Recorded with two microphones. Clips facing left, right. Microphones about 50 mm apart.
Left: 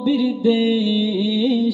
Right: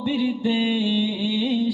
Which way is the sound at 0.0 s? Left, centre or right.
Centre.